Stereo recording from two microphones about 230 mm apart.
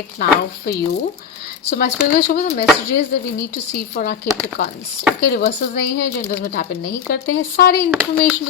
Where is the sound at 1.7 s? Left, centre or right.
Left.